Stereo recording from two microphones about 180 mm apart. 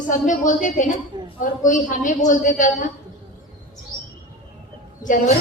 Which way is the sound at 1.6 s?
45° left (ahead or behind).